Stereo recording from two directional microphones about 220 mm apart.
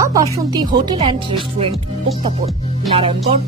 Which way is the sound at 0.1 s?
15° right (ahead or behind).